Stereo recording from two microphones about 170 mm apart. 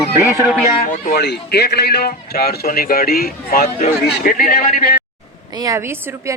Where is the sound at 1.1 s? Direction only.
75° left (ahead or behind).